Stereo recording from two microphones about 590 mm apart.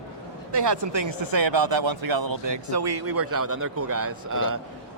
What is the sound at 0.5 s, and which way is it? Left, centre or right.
Speech, right.